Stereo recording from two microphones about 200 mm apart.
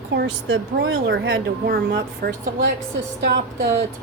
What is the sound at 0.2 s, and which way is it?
Speech, 65° right (ahead or behind).